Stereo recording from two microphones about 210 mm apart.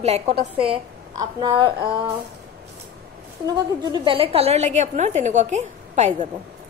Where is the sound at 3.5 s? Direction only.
20° right (ahead or behind).